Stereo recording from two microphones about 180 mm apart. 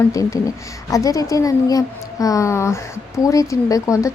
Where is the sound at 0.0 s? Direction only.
20° left (ahead or behind).